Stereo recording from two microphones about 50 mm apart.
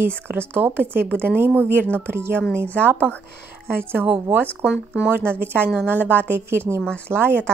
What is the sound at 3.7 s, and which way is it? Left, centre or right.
Speech, right.